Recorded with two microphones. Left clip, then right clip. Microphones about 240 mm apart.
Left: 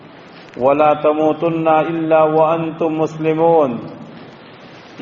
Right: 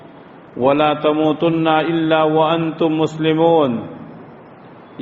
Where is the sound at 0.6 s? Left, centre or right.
Right.